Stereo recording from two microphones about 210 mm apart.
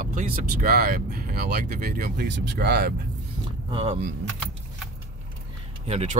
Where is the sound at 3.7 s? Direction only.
25° right (ahead or behind).